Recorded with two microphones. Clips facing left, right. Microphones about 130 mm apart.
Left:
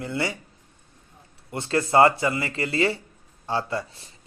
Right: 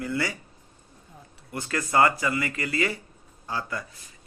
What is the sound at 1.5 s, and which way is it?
A man's voice, 25° left (ahead or behind).